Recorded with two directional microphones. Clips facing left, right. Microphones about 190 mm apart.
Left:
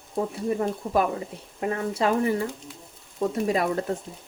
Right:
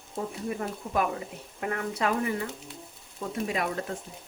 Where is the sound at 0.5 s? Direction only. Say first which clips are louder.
Left 6 dB; 35° left (ahead or behind).